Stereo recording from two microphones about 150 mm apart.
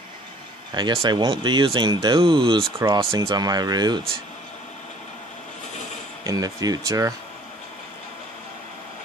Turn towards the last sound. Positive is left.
turn(degrees=-20)  # may be behind; listen again after turning